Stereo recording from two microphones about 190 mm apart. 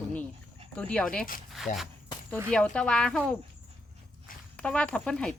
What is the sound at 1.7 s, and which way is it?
Speech, 40° left (ahead or behind).